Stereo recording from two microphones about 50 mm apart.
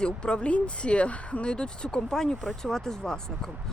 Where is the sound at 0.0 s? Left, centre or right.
Centre.